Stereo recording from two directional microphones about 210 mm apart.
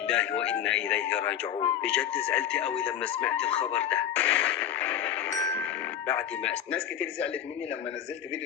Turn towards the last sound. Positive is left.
turn(degrees=5)  # may be behind; listen again after turning